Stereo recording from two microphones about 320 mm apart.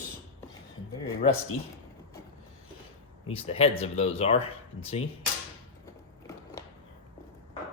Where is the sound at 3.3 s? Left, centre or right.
Centre.